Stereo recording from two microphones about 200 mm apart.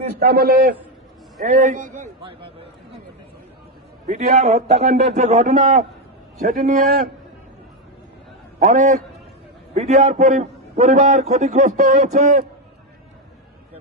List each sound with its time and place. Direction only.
0.2 s a man's voice: 50° right (ahead or behind)
2.2 s a man's voice: 30° right (ahead or behind)
4.0 s a man's voice: 35° right (ahead or behind)
8.5 s a man's voice: 40° right (ahead or behind)